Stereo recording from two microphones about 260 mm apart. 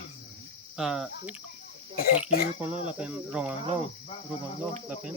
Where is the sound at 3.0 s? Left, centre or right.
Centre.